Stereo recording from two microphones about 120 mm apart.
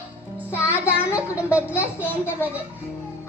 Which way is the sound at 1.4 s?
10° right (ahead or behind).